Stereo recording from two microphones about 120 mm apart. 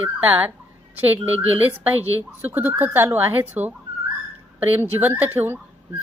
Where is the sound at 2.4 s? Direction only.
15° right (ahead or behind).